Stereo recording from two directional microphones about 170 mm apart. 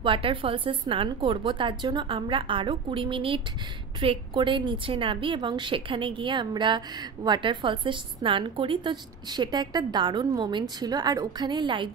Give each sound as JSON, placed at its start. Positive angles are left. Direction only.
{"t": 0.0, "sound": "a woman's voice", "side_deg": -30}